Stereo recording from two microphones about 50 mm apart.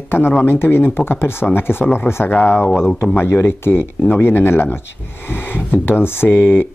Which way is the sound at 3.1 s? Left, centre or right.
Left.